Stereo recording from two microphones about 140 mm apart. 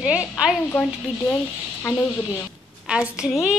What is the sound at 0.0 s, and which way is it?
Speech, 10° right (ahead or behind).